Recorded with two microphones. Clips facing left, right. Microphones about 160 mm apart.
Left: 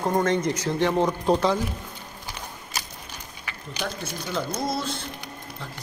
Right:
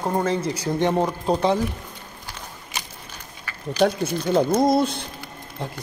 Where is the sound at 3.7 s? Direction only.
60° right (ahead or behind).